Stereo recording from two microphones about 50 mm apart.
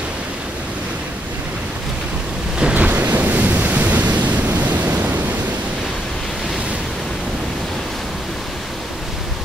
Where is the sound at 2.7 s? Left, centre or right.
Right.